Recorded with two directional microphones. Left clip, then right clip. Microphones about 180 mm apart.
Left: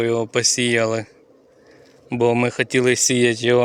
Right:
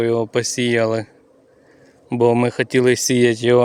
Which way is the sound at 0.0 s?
20° right (ahead or behind).